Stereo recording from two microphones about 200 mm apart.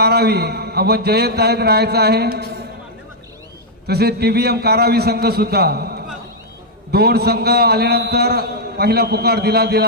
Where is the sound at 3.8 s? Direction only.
55° right (ahead or behind).